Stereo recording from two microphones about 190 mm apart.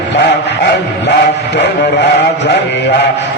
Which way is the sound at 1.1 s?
65° left (ahead or behind).